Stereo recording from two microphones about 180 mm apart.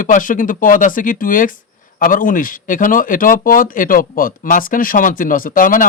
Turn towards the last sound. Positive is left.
turn(degrees=50)  # may be behind; listen again after turning